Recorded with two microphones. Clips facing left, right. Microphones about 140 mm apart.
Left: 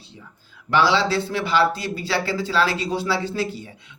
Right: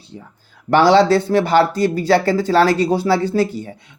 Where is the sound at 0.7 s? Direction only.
50° right (ahead or behind).